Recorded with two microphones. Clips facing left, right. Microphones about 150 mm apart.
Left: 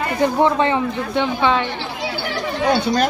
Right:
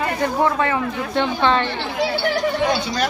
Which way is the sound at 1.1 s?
10° left (ahead or behind).